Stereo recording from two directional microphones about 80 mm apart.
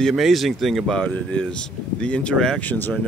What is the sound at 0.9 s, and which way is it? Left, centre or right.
Speech, centre.